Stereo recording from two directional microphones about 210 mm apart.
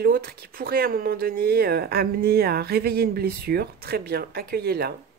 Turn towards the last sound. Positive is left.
turn(degrees=-50)  # may be behind; listen again after turning